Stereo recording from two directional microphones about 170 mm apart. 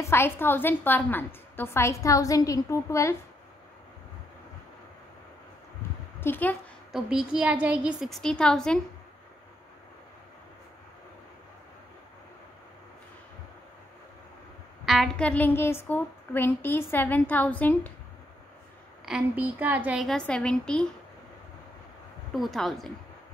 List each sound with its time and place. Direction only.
0.0 s a woman's voice: 15° left (ahead or behind)
6.2 s a woman's voice: 10° left (ahead or behind)
6.9 s a woman's voice: 5° right (ahead or behind)
14.9 s a woman's voice: 5° left (ahead or behind)
19.0 s a woman's voice: 5° right (ahead or behind)
22.3 s a woman's voice: centre (ahead or behind)